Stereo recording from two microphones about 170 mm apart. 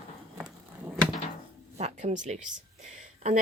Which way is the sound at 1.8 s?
45° right (ahead or behind).